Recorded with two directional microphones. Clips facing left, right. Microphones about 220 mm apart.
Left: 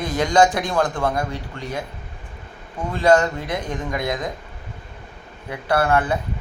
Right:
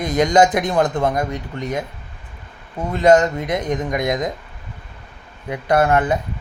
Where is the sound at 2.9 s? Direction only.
20° right (ahead or behind).